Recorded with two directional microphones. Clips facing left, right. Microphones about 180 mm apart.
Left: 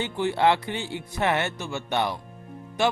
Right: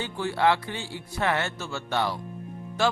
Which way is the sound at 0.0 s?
20° left (ahead or behind).